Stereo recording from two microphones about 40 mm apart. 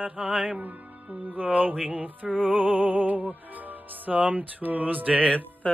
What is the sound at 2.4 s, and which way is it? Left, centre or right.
Music, right.